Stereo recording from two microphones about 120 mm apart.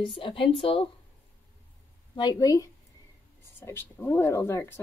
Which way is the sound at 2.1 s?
35° left (ahead or behind).